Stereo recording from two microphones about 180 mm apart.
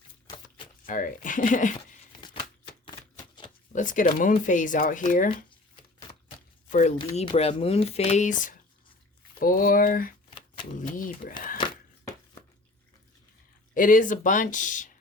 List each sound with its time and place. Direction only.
0.3 s chopping: 25° left (ahead or behind)
0.9 s speech: 50° left (ahead or behind)
3.7 s speech: 45° left (ahead or behind)
6.7 s speech: 45° left (ahead or behind)
7.0 s speech: 30° left (ahead or behind); by 11.5 s 50° left (ahead or behind)
11.5 s a sound: 25° left (ahead or behind)
13.7 s speech: 50° left (ahead or behind)